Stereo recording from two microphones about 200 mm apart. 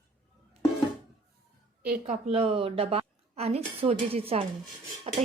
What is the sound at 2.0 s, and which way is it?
A woman's voice, 35° right (ahead or behind).